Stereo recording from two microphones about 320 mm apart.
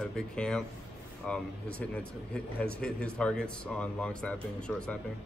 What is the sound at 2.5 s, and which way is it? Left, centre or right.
A man's voice, centre.